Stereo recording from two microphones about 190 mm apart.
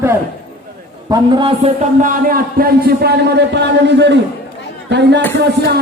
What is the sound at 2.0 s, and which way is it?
Speech, 45° right (ahead or behind).